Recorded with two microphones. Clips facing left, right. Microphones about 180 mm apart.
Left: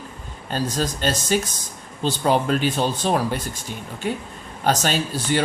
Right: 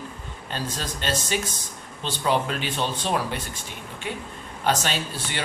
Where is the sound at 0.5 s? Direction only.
40° left (ahead or behind).